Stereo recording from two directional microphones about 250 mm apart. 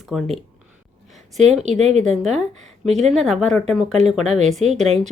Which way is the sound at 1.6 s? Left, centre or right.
Right.